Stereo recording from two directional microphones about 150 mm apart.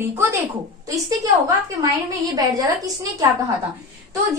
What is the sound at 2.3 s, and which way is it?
Speech, 25° right (ahead or behind).